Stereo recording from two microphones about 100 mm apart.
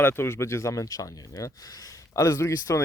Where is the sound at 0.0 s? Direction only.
25° left (ahead or behind).